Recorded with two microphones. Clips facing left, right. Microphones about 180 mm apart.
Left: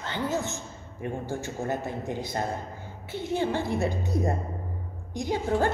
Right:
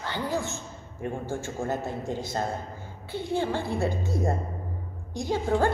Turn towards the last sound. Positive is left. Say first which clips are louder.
# right 1 dB
turn(degrees=15)  # may be behind; listen again after turning